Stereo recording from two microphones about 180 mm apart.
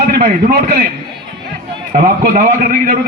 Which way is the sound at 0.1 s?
55° right (ahead or behind).